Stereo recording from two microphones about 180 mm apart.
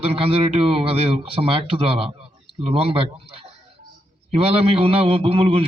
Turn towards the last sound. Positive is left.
turn(degrees=-30)  # may be behind; listen again after turning